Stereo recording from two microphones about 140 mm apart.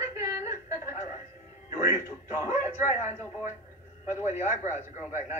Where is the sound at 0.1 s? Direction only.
20° right (ahead or behind).